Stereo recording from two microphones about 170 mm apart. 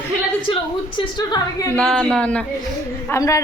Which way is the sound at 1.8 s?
5° left (ahead or behind).